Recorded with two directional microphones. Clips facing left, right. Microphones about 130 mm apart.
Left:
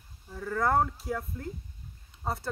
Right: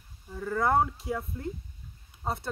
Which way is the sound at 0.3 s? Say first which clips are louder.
Right 1 dB; 5° right (ahead or behind).